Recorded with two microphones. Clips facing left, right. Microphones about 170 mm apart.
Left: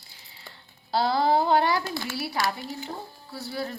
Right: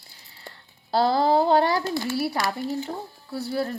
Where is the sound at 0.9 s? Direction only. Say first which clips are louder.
Right 3 dB; 45° right (ahead or behind).